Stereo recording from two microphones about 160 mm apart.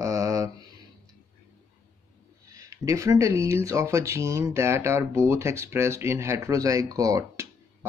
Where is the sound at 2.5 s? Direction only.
20° right (ahead or behind).